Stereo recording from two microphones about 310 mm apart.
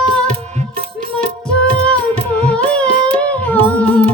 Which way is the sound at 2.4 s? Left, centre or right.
Centre.